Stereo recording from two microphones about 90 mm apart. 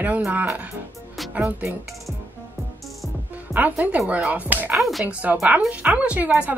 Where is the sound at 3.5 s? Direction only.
20° right (ahead or behind).